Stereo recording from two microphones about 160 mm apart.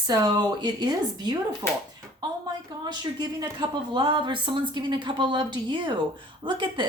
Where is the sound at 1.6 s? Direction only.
15° left (ahead or behind).